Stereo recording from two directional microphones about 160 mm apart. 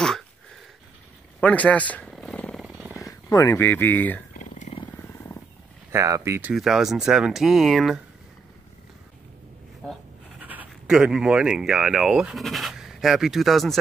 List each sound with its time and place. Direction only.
1.4 s purr: 10° left (ahead or behind)
2.6 s jackhammer: 5° right (ahead or behind)
3.1 s speech: 20° left (ahead or behind)
4.4 s wild animals: 50° left (ahead or behind)
4.9 s wild animals: 15° left (ahead or behind)
5.9 s speech: 20° right (ahead or behind)
6.5 s speech: centre (ahead or behind)
10.4 s speech: 10° right (ahead or behind)